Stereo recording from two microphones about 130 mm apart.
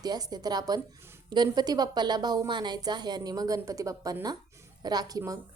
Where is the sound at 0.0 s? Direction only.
30° right (ahead or behind).